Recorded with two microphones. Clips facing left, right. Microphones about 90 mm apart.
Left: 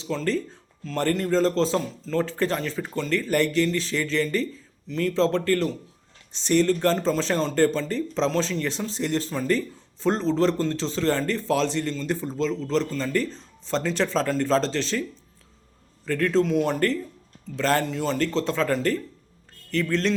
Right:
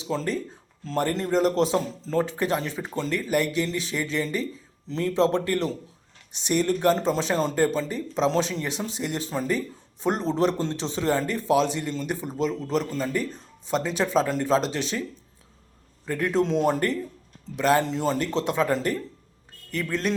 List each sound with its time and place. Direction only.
0.0 s a man's voice: 20° right (ahead or behind)
16.0 s a man's voice: 15° right (ahead or behind)